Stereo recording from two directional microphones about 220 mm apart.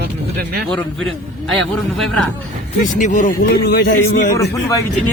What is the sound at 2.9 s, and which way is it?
Speech, 35° left (ahead or behind).